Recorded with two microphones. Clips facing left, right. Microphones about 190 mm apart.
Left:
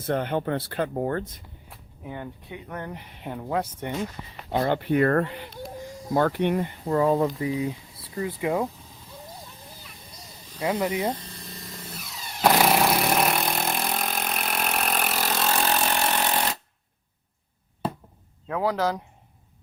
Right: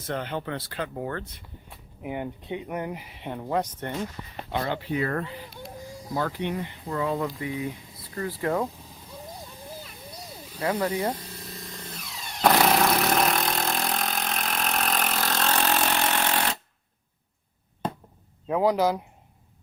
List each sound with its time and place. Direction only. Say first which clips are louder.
0.0 s speech: left 5 dB; 55° left (ahead or behind)
2.0 s speech: right 4 dB; 15° right (ahead or behind); by 3.9 s 10° left (ahead or behind)
4.5 s speech: left 5 dB; 35° left (ahead or behind)
4.8 s speech: left 7 dB; 60° left (ahead or behind)
6.1 s speech: left 6 dB; 55° left (ahead or behind)
6.9 s speech: left 6 dB; 35° left (ahead or behind)
8.1 s speech: left 1 dB; 15° left (ahead or behind)
10.6 s speech: left 1 dB; 10° left (ahead or behind)
11.1 s a sound: left 1 dB; 10° right (ahead or behind)
11.9 s tools: even; 5° left (ahead or behind)
18.4 s speech: right 3 dB; 15° right (ahead or behind)